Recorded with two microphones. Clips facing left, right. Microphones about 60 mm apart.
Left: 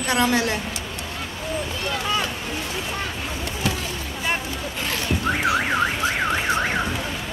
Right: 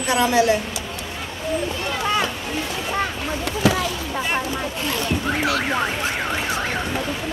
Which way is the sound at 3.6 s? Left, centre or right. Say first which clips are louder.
Right 8 dB; right.